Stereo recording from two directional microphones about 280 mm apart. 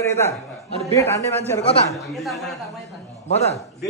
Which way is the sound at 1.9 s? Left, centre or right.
Centre.